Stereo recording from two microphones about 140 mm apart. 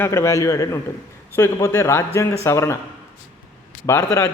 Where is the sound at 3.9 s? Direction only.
20° left (ahead or behind).